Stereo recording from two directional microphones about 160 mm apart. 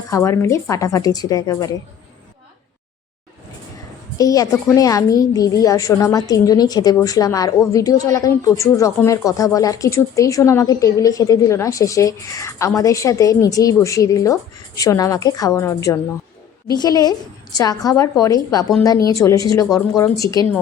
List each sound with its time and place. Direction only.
0.1 s a woman's voice: 20° left (ahead or behind)
4.2 s a woman's voice: 20° left (ahead or behind)